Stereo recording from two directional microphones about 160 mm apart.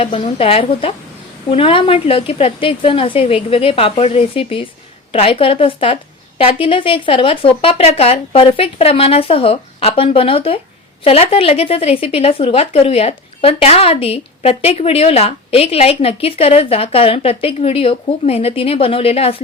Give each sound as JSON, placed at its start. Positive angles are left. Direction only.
{"t": 0.0, "sound": "speech", "side_deg": 35}